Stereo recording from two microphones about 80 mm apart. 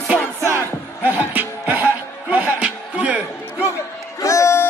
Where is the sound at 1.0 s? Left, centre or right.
Right.